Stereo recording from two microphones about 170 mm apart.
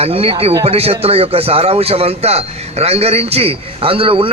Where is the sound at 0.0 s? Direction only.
35° right (ahead or behind).